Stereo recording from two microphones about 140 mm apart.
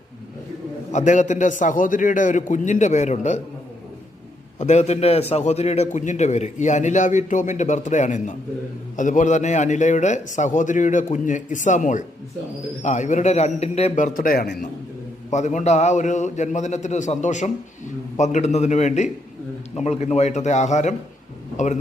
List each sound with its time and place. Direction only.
0.9 s a man's voice: 55° left (ahead or behind)
4.6 s a man's voice: 50° left (ahead or behind); by 14.7 s 85° left
15.3 s a man's voice: 60° left (ahead or behind)